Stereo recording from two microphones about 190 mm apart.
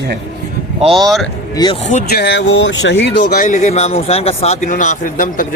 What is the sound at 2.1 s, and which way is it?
Speech, 60° left (ahead or behind).